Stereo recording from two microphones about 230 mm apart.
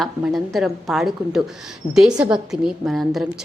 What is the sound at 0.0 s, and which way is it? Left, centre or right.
A woman's voice, centre.